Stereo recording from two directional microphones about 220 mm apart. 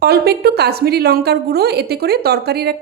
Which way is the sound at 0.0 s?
45° right (ahead or behind).